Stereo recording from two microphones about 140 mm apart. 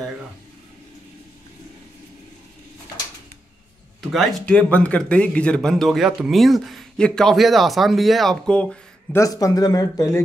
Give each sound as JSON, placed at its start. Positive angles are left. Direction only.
{"t": 4.1, "sound": "a man's voice", "side_deg": 0}
{"t": 9.1, "sound": "speech", "side_deg": 25}